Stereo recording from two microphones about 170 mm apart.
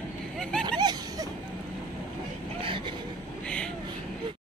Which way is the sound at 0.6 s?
25° right (ahead or behind).